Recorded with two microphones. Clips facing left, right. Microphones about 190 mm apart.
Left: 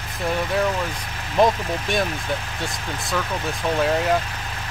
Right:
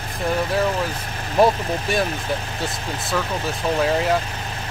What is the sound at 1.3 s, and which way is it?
Speech, 10° right (ahead or behind).